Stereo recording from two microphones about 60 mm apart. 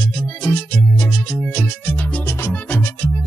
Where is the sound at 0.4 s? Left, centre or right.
Left.